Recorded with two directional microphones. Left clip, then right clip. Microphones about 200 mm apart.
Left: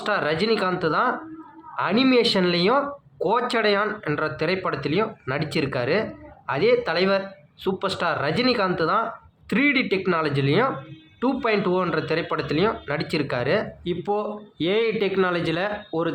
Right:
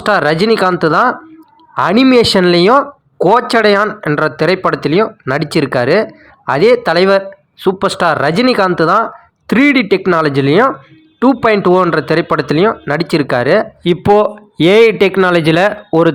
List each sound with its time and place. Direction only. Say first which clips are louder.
0.0 s speech: right 12 dB; 45° right (ahead or behind)